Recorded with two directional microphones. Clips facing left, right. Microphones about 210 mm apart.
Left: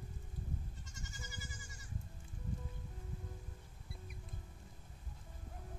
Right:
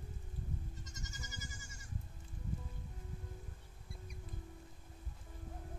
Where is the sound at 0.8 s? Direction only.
40° right (ahead or behind).